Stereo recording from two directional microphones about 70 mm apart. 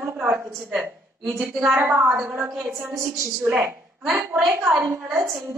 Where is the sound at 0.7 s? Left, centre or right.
Centre.